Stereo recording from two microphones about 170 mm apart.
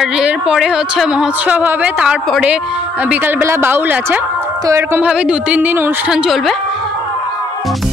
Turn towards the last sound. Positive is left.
turn(degrees=0)  # may be behind; listen again after turning